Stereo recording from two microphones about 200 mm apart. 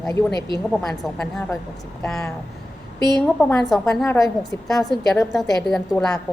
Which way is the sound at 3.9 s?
15° left (ahead or behind).